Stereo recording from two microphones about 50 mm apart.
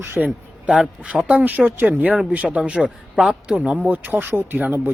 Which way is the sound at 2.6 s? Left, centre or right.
Centre.